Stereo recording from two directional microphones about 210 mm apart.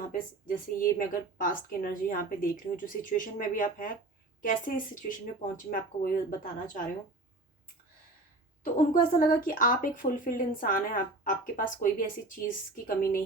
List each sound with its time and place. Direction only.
0.1 s speech: 40° left (ahead or behind)
8.6 s speech: 40° left (ahead or behind)